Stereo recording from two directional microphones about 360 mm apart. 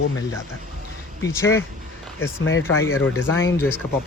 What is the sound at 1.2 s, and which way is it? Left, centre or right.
Speech, centre.